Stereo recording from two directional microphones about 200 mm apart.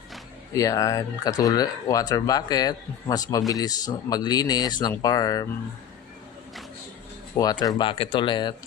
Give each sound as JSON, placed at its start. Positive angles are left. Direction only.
{"t": 0.5, "sound": "speech", "side_deg": 15}
{"t": 7.3, "sound": "speech", "side_deg": 20}